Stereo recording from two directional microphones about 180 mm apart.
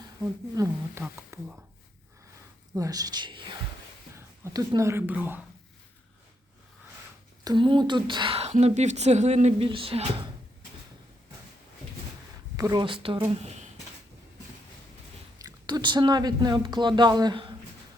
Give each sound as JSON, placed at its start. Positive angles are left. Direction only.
{"t": 0.5, "sound": "speech", "side_deg": -15}
{"t": 2.7, "sound": "speech", "side_deg": -20}
{"t": 7.4, "sound": "speech", "side_deg": -25}
{"t": 12.5, "sound": "speech", "side_deg": -20}
{"t": 15.4, "sound": "speech", "side_deg": -25}